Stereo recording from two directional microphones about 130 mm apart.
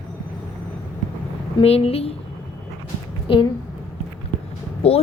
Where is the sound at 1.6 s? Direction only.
50° left (ahead or behind).